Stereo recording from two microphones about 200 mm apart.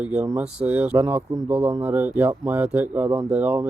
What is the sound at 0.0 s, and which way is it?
Speech, 5° right (ahead or behind).